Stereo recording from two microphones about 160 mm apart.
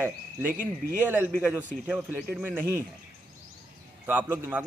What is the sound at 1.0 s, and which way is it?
Speech, 10° right (ahead or behind).